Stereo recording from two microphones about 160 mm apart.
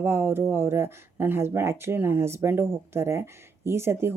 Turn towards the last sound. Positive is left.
turn(degrees=-15)  # may be behind; listen again after turning